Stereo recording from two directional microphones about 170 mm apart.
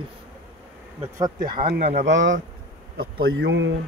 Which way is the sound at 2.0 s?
90° right.